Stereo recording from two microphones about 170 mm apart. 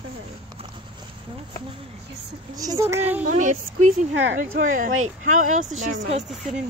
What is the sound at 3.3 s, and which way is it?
Speech, 45° right (ahead or behind).